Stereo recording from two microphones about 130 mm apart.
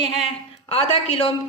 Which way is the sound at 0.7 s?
50° left (ahead or behind).